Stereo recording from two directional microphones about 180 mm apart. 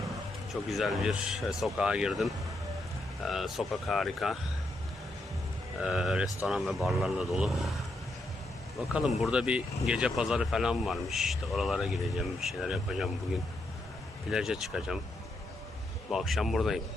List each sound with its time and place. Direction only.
0.5 s speech: centre (ahead or behind)
5.8 s speech: centre (ahead or behind)
8.8 s speech: 5° right (ahead or behind)
14.3 s speech: 5° right (ahead or behind)
16.0 s speech: centre (ahead or behind)